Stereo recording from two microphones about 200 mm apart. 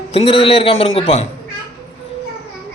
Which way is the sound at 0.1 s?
30° left (ahead or behind).